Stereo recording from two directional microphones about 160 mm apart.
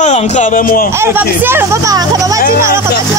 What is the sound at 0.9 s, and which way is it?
Speech, 15° right (ahead or behind).